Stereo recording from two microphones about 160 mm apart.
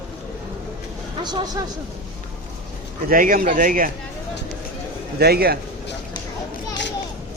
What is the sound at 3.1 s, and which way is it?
Speech, 60° right (ahead or behind).